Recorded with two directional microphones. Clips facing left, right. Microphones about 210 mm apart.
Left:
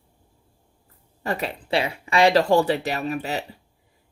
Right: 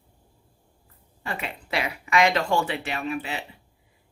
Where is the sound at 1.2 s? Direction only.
40° left (ahead or behind).